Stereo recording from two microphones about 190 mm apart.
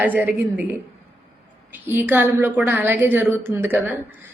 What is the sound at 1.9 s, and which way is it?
A woman's voice, 10° right (ahead or behind).